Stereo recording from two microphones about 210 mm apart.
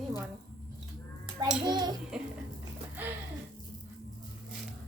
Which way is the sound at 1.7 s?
20° right (ahead or behind).